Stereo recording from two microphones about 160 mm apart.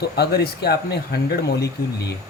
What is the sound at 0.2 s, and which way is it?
Speech, 80° left.